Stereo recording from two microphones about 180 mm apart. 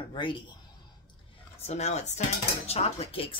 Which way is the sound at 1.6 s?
35° left (ahead or behind).